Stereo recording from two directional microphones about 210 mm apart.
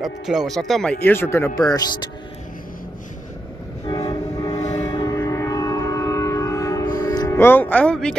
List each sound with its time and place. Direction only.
0.0 s speech: centre (ahead or behind); by 2.0 s 20° left (ahead or behind)
3.8 s train: 20° left (ahead or behind)
4.6 s train: 30° left (ahead or behind)
4.8 s train: 15° left (ahead or behind)